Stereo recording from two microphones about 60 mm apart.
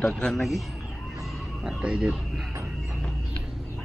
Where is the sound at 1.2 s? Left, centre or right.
Centre.